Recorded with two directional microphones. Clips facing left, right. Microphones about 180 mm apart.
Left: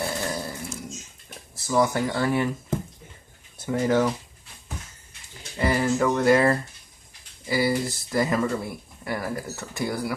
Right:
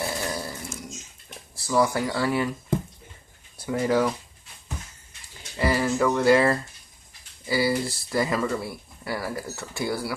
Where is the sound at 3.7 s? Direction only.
25° left (ahead or behind).